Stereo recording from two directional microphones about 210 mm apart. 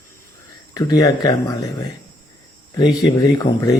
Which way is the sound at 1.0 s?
15° left (ahead or behind).